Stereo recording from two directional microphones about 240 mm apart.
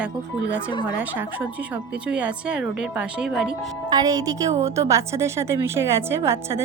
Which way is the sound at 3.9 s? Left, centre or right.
Centre.